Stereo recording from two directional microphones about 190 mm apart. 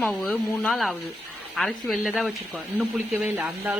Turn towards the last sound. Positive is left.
turn(degrees=-10)  # may be behind; listen again after turning